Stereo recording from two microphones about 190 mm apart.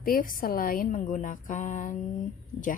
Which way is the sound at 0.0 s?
50° left (ahead or behind).